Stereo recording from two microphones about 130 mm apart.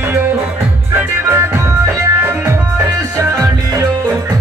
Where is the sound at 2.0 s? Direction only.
20° right (ahead or behind).